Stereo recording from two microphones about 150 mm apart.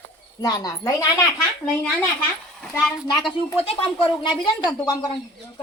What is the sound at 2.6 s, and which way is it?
Speech, centre (ahead or behind).